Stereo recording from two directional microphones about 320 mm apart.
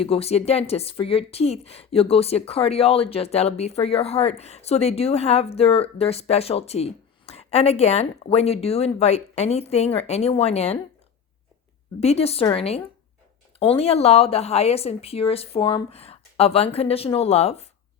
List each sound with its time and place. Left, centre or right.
0.0 s speech: centre
11.9 s speech: centre